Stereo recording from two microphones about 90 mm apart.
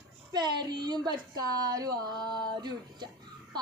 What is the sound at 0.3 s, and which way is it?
A child's voice, 55° right (ahead or behind).